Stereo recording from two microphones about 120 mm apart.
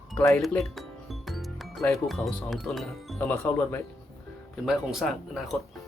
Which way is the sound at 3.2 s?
20° left (ahead or behind).